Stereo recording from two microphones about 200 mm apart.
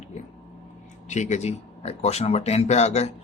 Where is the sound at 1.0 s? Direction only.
35° left (ahead or behind).